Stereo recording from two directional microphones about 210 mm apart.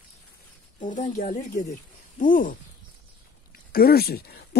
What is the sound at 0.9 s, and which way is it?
Speech, 35° left (ahead or behind).